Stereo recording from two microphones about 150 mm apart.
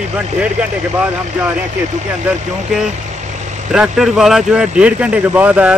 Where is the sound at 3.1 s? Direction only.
50° right (ahead or behind).